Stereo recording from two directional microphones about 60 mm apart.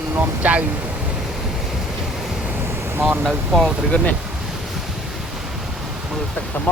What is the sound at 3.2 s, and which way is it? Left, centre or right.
Speech, centre.